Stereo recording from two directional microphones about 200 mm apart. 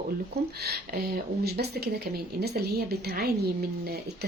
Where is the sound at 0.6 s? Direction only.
50° right (ahead or behind).